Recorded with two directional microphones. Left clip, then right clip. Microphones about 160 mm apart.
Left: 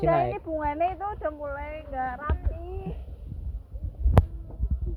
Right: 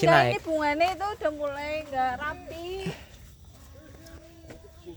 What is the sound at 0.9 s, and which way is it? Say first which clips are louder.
Speech: right 2 dB; 90° right.